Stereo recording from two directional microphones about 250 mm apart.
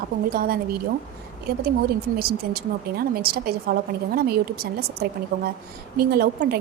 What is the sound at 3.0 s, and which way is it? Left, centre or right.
A woman's voice, right.